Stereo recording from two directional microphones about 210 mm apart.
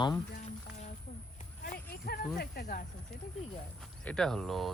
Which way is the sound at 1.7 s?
45° left (ahead or behind).